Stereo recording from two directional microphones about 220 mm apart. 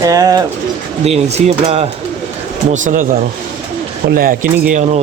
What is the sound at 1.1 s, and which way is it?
Speech, 30° right (ahead or behind).